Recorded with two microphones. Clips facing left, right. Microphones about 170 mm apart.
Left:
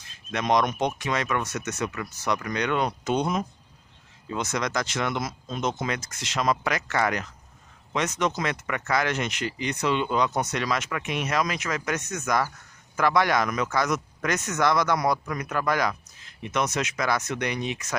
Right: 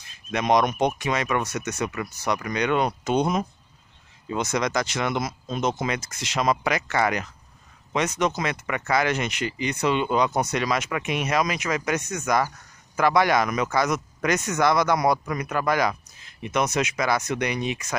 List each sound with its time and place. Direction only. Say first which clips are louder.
0.3 s speech: right 2 dB; 10° right (ahead or behind)